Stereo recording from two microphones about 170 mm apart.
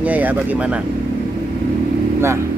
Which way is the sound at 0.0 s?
10° right (ahead or behind).